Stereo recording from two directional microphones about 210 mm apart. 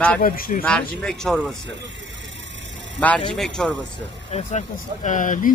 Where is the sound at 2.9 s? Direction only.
5° left (ahead or behind).